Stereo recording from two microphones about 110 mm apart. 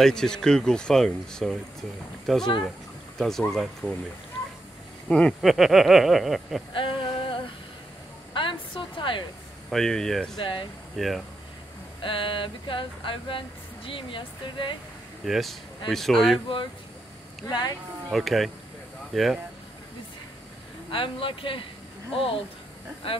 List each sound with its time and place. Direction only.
0.0 s speech: 5° left (ahead or behind)
5.0 s speech: 10° left (ahead or behind)
5.4 s speech: centre (ahead or behind)
6.7 s a sound: 50° left (ahead or behind)
9.7 s speech: 5° left (ahead or behind)
10.4 s a sound: 50° left (ahead or behind)
11.0 s speech: centre (ahead or behind)
12.0 s a sound: 50° left (ahead or behind)
15.2 s speech: centre (ahead or behind)
17.5 s speech: 40° left (ahead or behind)
18.1 s speech: centre (ahead or behind)
20.9 s a sound: 50° left (ahead or behind)
22.1 s speech: 55° left (ahead or behind)